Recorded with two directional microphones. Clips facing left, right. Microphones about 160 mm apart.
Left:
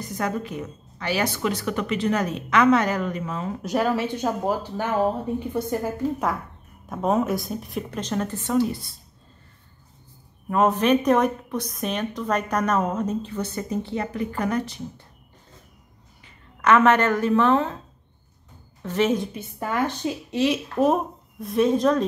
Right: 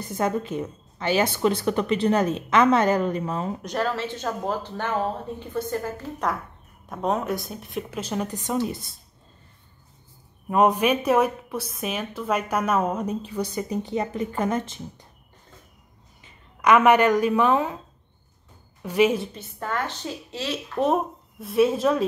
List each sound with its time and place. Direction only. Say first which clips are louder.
0.1 s a woman's voice: right 3 dB; 25° right (ahead or behind)
3.6 s a woman's voice: left 7 dB; 10° left (ahead or behind); by 8.9 s 20° right (ahead or behind)
10.5 s speech: left 1 dB; 15° right (ahead or behind)
16.6 s speech: right 1 dB; 10° right (ahead or behind)
18.8 s a woman's voice: right 2 dB; 10° right (ahead or behind)
19.3 s speech: left 3 dB; 10° left (ahead or behind)
20.7 s a woman's voice: left 2 dB; centre (ahead or behind)